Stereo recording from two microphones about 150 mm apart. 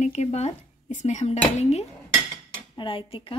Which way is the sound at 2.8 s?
35° left (ahead or behind).